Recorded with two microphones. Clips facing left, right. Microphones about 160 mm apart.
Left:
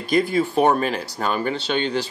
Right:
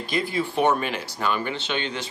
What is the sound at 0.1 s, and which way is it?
Speech, 45° left (ahead or behind).